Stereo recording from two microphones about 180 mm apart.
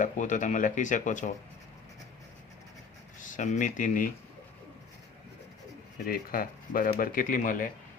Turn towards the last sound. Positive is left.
turn(degrees=50)  # may be behind; listen again after turning